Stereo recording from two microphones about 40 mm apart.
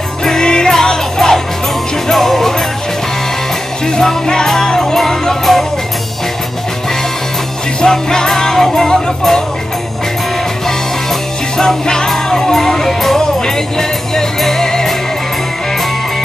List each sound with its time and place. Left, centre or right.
0.2 s music: centre
3.8 s music: centre
7.8 s music: centre
11.5 s music: centre